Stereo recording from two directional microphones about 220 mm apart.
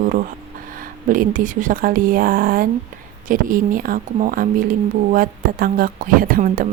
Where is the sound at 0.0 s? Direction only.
40° right (ahead or behind).